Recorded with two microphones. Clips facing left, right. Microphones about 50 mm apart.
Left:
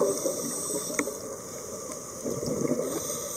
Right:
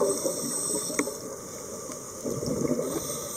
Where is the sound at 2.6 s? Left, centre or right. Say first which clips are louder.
Even; centre.